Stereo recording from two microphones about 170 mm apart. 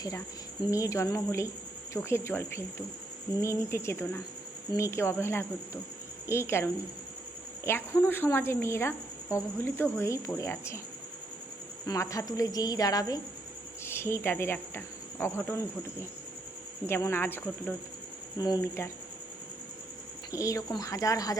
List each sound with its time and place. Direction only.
0.7 s a woman's voice: 20° left (ahead or behind)
11.9 s a woman's voice: 20° left (ahead or behind)
20.3 s a woman's voice: 20° left (ahead or behind)